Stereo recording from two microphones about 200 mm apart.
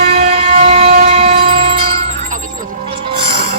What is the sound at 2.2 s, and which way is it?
Music, 40° right (ahead or behind).